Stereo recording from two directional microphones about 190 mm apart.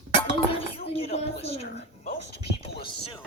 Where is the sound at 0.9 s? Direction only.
35° left (ahead or behind).